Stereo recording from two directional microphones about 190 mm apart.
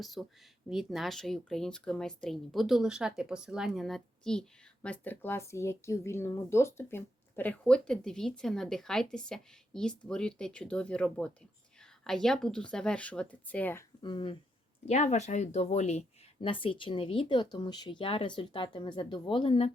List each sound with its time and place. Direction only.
0.0 s speech: centre (ahead or behind)
14.0 s speech: 25° left (ahead or behind)
14.8 s speech: 35° left (ahead or behind)